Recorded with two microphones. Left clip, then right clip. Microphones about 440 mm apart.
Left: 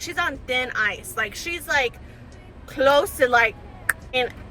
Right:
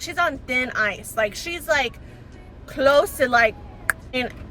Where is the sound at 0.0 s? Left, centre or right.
Centre.